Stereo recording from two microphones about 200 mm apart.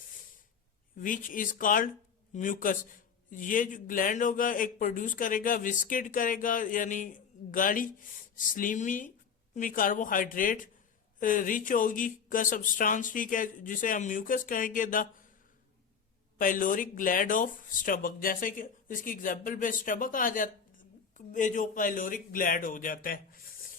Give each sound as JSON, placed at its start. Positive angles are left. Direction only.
{"t": 0.9, "sound": "speech", "side_deg": 40}
{"t": 16.4, "sound": "speech", "side_deg": 45}